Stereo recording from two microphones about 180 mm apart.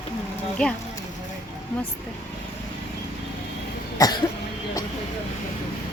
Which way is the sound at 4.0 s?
20° left (ahead or behind).